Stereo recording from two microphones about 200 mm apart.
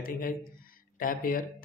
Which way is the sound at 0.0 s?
45° left (ahead or behind).